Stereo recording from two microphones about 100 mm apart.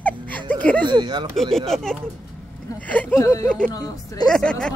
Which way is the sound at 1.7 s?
5° left (ahead or behind).